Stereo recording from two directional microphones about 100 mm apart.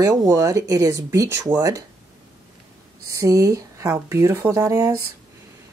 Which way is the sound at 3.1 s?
35° right (ahead or behind).